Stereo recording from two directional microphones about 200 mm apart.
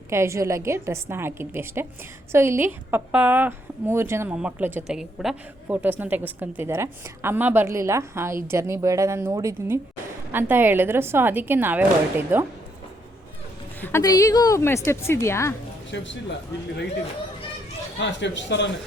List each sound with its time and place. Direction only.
0.1 s a woman's voice: 15° right (ahead or behind)
13.8 s a woman's voice: 15° left (ahead or behind)
18.0 s a man's voice: 65° left (ahead or behind)